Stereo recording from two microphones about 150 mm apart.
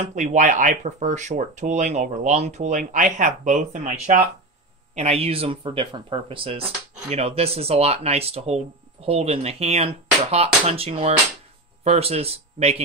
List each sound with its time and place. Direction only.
0.0 s speech: 55° right (ahead or behind)